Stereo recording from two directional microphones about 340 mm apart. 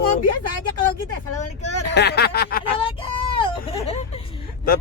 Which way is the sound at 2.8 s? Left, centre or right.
Centre.